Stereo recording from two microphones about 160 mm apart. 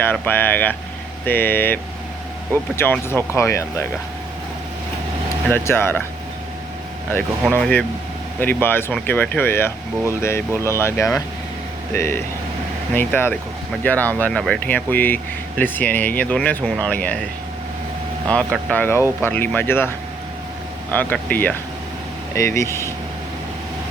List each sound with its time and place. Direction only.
0.0 s speech: 10° left (ahead or behind)
5.5 s speech: 15° left (ahead or behind)
7.6 s speech: 5° left (ahead or behind)
18.3 s speech: 5° left (ahead or behind)
20.9 s speech: 10° left (ahead or behind)